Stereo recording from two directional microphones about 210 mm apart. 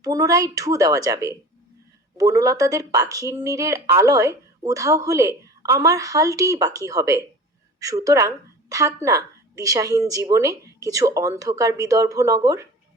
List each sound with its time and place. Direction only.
0.0 s speech: 15° right (ahead or behind)